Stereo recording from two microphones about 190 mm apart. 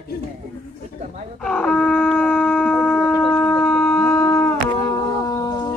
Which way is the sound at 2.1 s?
10° left (ahead or behind).